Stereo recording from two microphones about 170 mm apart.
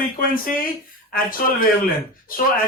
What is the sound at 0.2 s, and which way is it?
Speech, 55° left (ahead or behind).